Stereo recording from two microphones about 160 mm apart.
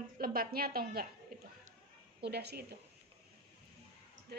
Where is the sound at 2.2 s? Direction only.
90° right.